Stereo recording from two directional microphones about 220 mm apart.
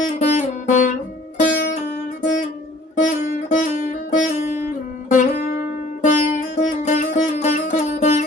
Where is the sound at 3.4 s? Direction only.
35° left (ahead or behind).